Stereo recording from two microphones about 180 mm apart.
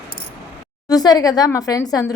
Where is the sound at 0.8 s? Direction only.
20° left (ahead or behind).